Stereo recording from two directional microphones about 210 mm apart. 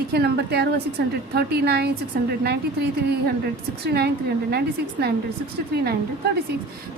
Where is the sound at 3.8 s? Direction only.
50° right (ahead or behind).